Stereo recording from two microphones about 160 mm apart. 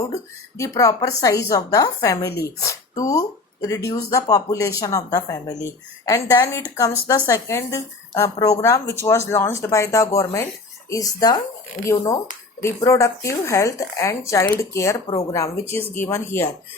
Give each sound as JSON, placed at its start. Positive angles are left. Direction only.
{"t": 0.5, "sound": "speech", "side_deg": 20}
{"t": 15.0, "sound": "speech", "side_deg": 35}
{"t": 16.0, "sound": "speech", "side_deg": 15}